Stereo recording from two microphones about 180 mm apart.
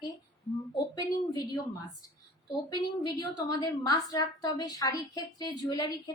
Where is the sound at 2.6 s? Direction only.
20° left (ahead or behind).